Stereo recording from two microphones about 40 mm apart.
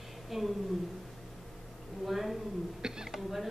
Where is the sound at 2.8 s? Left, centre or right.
Centre.